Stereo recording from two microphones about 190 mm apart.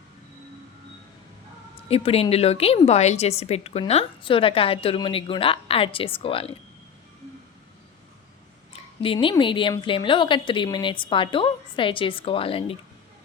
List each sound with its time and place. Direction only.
1.9 s a woman's voice: 30° left (ahead or behind)
8.7 s a sound: 30° left (ahead or behind)
9.1 s a woman's voice: 20° left (ahead or behind)